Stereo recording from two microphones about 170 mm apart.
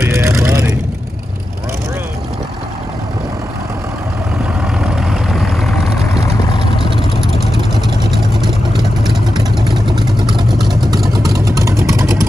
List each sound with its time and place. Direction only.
0.0 s vehicle: 15° right (ahead or behind)
4.7 s vehicle: 5° right (ahead or behind)
9.7 s vehicle: 25° right (ahead or behind)